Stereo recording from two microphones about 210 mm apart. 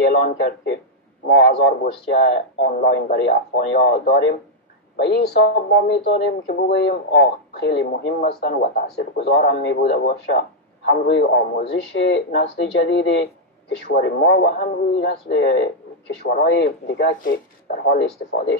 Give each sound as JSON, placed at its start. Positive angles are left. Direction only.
{"t": 0.0, "sound": "a man's voice", "side_deg": 55}
{"t": 4.9, "sound": "a man's voice", "side_deg": 55}
{"t": 9.8, "sound": "a man's voice", "side_deg": 45}